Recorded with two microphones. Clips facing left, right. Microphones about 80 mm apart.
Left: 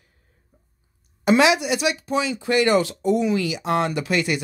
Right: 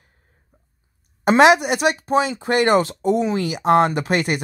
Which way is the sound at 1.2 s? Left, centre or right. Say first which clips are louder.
Right 4 dB; right.